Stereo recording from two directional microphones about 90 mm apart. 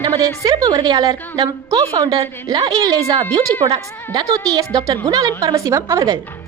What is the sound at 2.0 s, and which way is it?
A woman's voice, 45° right (ahead or behind).